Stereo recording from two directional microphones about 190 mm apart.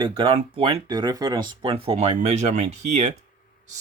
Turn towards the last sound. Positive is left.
turn(degrees=-35)  # may be behind; listen again after turning